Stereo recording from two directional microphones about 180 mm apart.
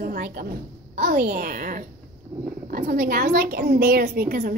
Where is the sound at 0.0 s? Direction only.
55° right (ahead or behind).